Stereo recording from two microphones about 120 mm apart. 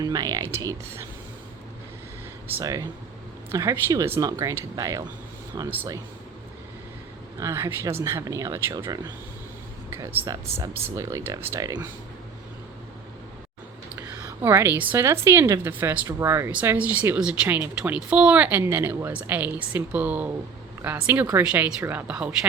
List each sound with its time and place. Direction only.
0.0 s speech: 35° right (ahead or behind)
2.5 s speech: 25° right (ahead or behind)
7.3 s speech: 25° right (ahead or behind)
10.2 s speech: 25° right (ahead or behind)
14.4 s a woman's voice: 20° right (ahead or behind)